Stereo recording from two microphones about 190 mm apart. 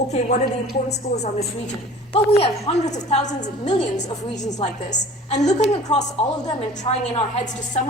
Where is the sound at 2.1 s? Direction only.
30° left (ahead or behind).